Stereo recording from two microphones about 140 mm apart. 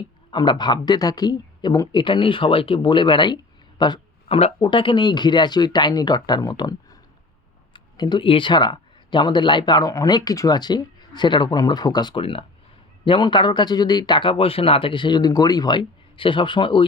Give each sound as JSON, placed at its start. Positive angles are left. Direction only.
{"t": 0.3, "sound": "speech", "side_deg": 35}